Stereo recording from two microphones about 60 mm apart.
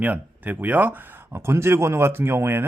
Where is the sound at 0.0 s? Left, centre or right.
Right.